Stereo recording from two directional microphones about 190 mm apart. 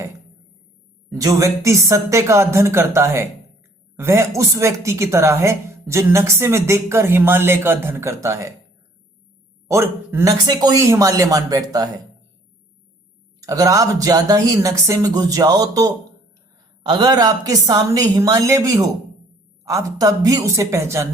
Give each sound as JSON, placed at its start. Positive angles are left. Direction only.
{"t": 1.1, "sound": "a woman's voice", "side_deg": -15}
{"t": 9.6, "sound": "a woman's voice", "side_deg": -15}
{"t": 13.4, "sound": "a woman's voice", "side_deg": -20}